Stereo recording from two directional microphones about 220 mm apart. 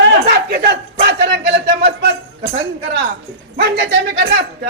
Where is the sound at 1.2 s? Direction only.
50° right (ahead or behind).